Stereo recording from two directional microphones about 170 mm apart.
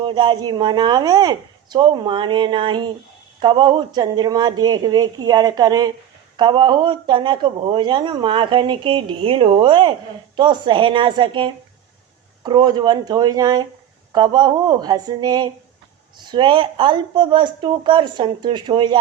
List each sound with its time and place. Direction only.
0.0 s speech: 25° right (ahead or behind)